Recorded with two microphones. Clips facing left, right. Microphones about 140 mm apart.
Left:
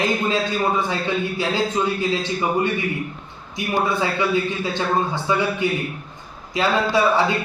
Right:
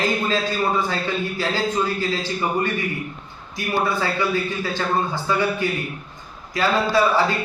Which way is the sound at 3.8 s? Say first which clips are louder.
Left 1 dB; 25° left (ahead or behind).